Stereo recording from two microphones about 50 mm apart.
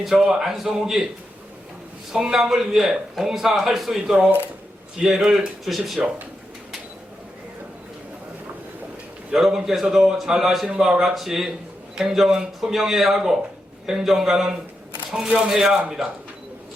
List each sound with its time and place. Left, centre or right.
0.0 s speech: centre
2.1 s a man's voice: centre
4.0 s speech: centre
5.0 s a man's voice: centre
9.3 s a man's voice: centre
10.7 s a man's voice: centre